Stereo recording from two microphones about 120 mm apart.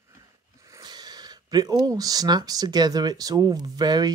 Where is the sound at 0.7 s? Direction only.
35° right (ahead or behind).